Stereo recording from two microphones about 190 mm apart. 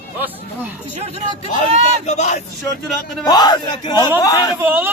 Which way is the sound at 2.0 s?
40° left (ahead or behind).